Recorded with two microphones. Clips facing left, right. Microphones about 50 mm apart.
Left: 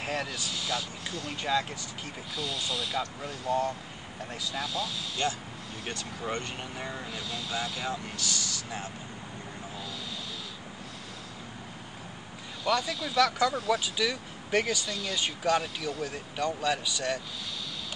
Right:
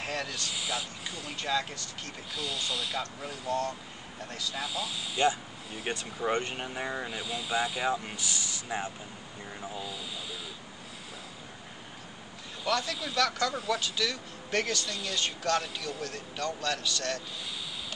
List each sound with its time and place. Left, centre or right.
0.0 s speech: centre
0.5 s speech: centre
4.6 s speech: centre
5.9 s speech: centre
12.6 s speech: centre